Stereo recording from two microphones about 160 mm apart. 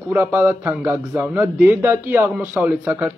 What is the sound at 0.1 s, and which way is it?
Speech, 10° right (ahead or behind).